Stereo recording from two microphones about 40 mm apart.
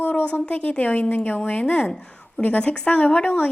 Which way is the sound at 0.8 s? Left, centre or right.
Left.